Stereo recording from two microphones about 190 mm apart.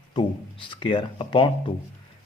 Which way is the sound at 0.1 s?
25° left (ahead or behind).